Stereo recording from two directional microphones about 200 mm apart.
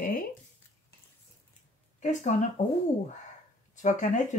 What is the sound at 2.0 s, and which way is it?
Speech, 40° left (ahead or behind).